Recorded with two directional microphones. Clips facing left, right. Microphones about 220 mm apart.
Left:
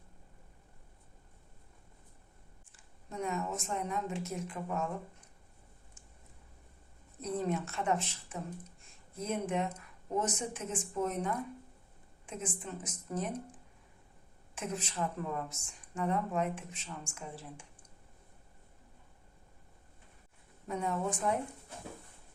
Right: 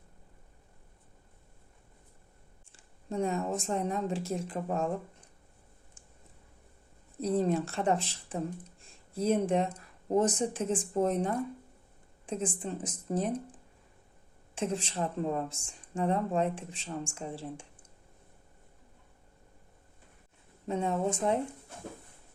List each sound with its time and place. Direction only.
2.7 s a woman's voice: 30° right (ahead or behind)
7.2 s a woman's voice: 35° right (ahead or behind)
14.5 s a woman's voice: 30° right (ahead or behind)
20.7 s a woman's voice: 25° right (ahead or behind)